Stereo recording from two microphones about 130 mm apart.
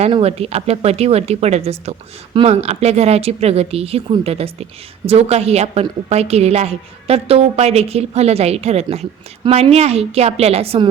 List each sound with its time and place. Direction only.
0.1 s a woman's voice: 50° right (ahead or behind)